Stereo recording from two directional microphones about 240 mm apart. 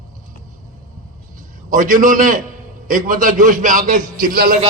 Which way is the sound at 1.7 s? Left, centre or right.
Right.